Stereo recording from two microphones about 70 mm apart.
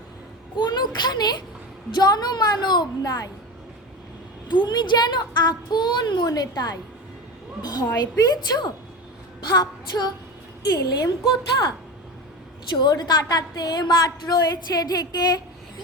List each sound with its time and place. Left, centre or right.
0.6 s a woman's voice: left
4.4 s a woman's voice: left
7.6 s a woman's voice: left
9.4 s a sound: left
10.7 s a woman's voice: left
12.8 s a woman's voice: left